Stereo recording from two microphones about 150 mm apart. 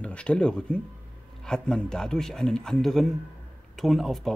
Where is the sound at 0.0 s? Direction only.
5° left (ahead or behind).